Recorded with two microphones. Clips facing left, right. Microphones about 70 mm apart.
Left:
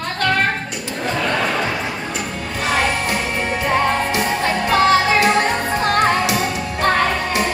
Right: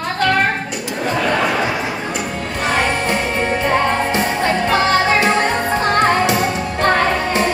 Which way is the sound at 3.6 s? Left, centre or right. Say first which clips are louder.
Even; centre.